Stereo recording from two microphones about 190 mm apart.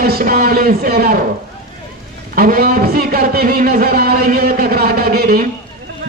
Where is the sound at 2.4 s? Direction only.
50° right (ahead or behind).